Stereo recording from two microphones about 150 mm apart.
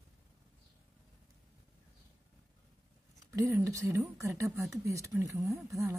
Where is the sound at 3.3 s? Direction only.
20° right (ahead or behind).